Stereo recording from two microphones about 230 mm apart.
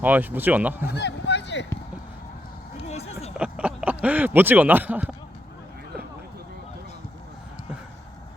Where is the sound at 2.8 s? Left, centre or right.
Left.